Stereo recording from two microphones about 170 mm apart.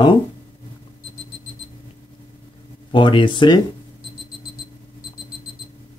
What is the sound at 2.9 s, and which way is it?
Speech, 30° left (ahead or behind).